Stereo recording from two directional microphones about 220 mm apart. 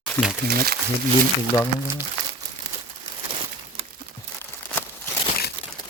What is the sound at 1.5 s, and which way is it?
Speech, 15° left (ahead or behind).